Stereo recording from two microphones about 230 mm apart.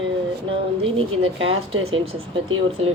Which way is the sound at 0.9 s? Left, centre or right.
Right.